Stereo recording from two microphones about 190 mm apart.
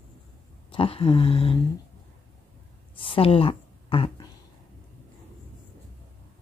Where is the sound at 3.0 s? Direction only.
30° left (ahead or behind).